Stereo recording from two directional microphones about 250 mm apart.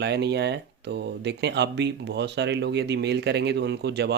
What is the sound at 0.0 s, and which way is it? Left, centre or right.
Speech, right.